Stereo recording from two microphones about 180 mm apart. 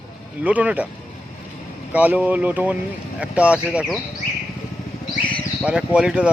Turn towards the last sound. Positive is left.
turn(degrees=-5)  # may be behind; listen again after turning